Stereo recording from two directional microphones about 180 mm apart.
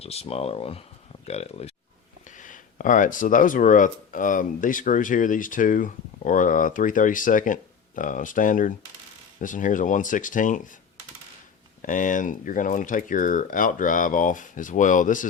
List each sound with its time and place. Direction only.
0.0 s speech: 35° left (ahead or behind)
2.4 s speech: 45° left (ahead or behind)
11.8 s speech: 45° left (ahead or behind)